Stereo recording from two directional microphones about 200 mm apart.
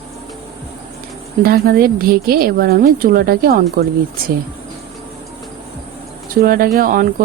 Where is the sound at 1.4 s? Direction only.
45° right (ahead or behind).